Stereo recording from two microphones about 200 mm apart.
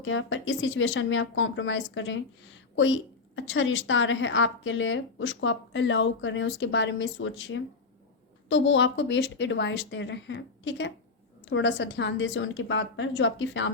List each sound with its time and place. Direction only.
0.0 s speech: 75° left (ahead or behind)